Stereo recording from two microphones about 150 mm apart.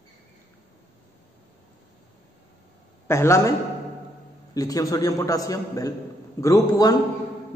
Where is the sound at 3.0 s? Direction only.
20° left (ahead or behind).